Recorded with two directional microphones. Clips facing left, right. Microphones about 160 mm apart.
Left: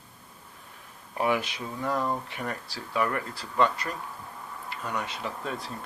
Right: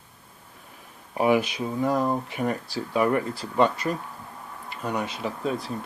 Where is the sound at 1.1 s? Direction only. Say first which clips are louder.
Right 6 dB; 20° right (ahead or behind).